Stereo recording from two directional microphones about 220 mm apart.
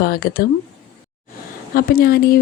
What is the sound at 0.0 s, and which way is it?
Speech, 45° left (ahead or behind).